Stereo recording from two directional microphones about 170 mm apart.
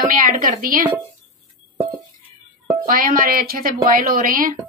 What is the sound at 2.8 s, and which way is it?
A woman's voice, 55° right (ahead or behind).